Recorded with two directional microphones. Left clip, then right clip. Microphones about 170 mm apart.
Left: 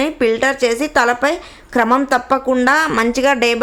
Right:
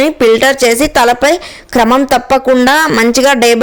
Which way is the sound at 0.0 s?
45° right (ahead or behind).